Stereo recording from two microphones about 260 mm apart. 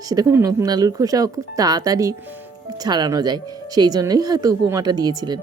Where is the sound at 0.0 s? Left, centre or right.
Centre.